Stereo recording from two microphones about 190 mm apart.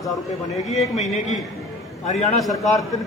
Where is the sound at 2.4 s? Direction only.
Centre (ahead or behind).